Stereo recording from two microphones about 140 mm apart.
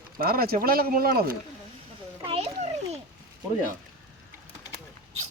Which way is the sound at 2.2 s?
45° right (ahead or behind).